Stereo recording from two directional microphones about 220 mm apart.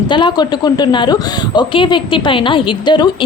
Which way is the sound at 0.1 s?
20° left (ahead or behind).